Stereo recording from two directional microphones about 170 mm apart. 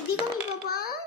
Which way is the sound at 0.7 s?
65° left (ahead or behind).